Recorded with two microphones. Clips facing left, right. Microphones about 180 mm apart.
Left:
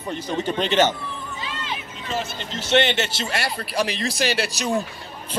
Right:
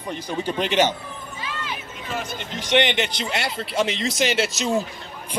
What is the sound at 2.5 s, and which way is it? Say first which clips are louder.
A man's voice: left 1 dB; 15° right (ahead or behind).